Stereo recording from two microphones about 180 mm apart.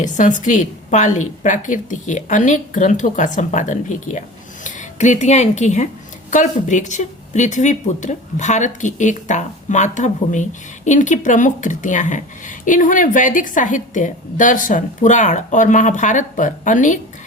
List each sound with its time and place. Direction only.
0.0 s a woman's voice: 45° left (ahead or behind)